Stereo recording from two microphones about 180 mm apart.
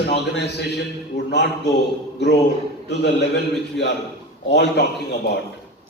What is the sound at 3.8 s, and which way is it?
A man's voice, 80° left.